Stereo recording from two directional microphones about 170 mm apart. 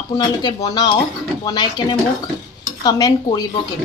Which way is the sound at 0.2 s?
25° left (ahead or behind).